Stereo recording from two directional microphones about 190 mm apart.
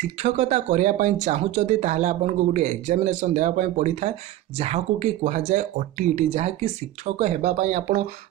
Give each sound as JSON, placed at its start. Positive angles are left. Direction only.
{"t": 0.2, "sound": "speech", "side_deg": -35}